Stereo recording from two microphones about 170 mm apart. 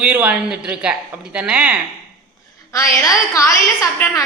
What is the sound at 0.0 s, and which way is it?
A woman's voice, 10° right (ahead or behind).